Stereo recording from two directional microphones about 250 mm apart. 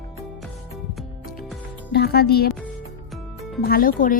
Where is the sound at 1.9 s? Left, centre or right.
Left.